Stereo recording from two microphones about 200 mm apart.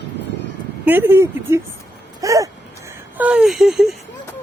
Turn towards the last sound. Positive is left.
turn(degrees=0)  # may be behind; listen again after turning